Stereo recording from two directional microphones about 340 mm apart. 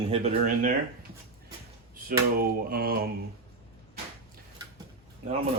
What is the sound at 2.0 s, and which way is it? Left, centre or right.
Speech, right.